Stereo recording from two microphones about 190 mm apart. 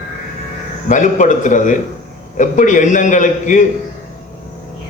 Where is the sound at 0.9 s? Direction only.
40° left (ahead or behind).